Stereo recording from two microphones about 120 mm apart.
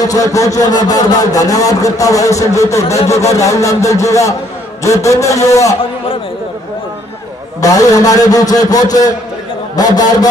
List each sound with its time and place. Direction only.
0.0 s speech: 30° left (ahead or behind)
7.6 s a man's voice: 30° left (ahead or behind)